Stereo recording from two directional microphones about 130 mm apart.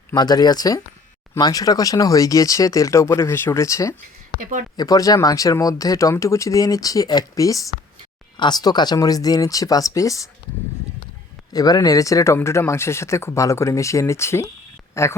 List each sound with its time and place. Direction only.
0.1 s speech: 30° left (ahead or behind)
11.5 s speech: 30° left (ahead or behind)